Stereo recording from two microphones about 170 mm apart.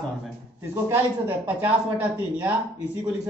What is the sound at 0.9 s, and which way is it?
Speech, 10° right (ahead or behind).